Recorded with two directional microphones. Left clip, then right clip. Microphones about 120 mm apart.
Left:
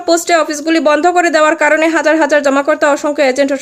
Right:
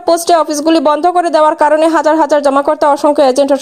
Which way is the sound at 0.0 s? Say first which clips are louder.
Right 2 dB; 25° right (ahead or behind).